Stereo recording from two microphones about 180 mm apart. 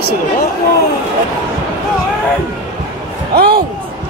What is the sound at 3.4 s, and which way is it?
Speech, 55° right (ahead or behind).